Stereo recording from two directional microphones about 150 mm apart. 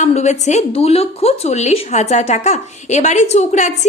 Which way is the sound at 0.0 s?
50° left (ahead or behind).